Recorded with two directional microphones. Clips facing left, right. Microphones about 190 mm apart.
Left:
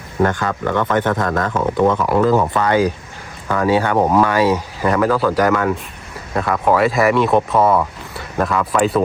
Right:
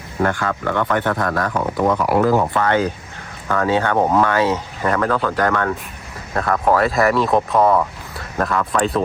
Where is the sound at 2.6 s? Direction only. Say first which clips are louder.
Left 2 dB; 15° left (ahead or behind).